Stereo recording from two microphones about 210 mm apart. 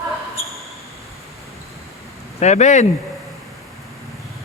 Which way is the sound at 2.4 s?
35° left (ahead or behind).